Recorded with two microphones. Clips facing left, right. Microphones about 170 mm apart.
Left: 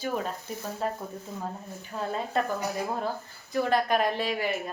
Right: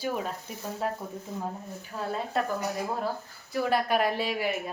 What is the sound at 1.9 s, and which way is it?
Speech, centre (ahead or behind).